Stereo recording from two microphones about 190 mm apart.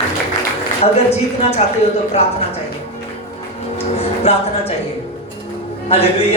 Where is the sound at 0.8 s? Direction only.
35° left (ahead or behind).